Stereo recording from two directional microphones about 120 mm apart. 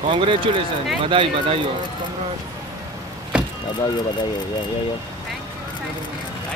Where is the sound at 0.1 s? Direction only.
45° right (ahead or behind).